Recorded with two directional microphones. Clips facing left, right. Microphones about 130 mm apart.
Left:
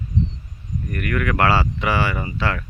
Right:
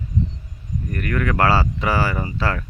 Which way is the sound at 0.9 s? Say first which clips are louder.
Even; 30° right (ahead or behind).